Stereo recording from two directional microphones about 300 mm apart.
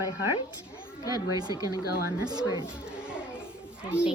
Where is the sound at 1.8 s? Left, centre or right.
Left.